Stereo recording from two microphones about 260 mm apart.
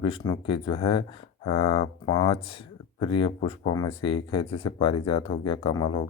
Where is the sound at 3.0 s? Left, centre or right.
Centre.